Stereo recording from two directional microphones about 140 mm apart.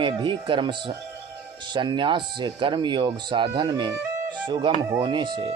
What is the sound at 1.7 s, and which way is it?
Speech, 35° right (ahead or behind).